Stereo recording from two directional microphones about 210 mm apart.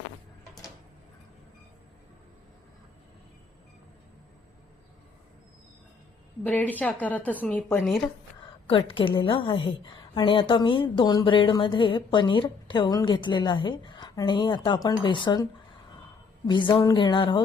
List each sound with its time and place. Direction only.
6.4 s a woman's voice: 5° left (ahead or behind)
8.6 s a woman's voice: 25° left (ahead or behind)
16.5 s a woman's voice: 25° left (ahead or behind)